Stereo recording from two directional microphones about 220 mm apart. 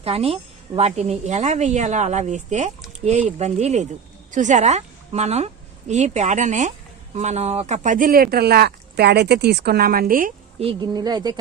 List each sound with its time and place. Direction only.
0.0 s a woman's voice: 25° right (ahead or behind)
10.6 s speech: 20° right (ahead or behind)